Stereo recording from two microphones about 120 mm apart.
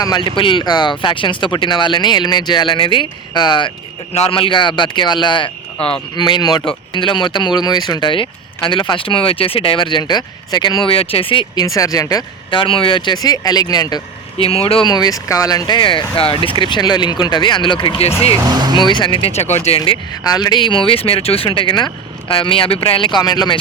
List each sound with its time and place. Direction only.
0.3 s speech: 45° left (ahead or behind)
4.1 s speech: 55° left (ahead or behind); by 10.9 s 40° left (ahead or behind)
10.9 s speech: 50° left (ahead or behind)
11.5 s speech: 30° left (ahead or behind)
12.5 s speech: 45° left (ahead or behind)
14.3 s speech: 55° left (ahead or behind)
14.8 s speech: 35° left (ahead or behind)
18.4 s speech: 35° right (ahead or behind)
18.8 s speech: 40° left (ahead or behind)
19.4 s speech: 65° left (ahead or behind)
19.8 s speech: 40° left (ahead or behind)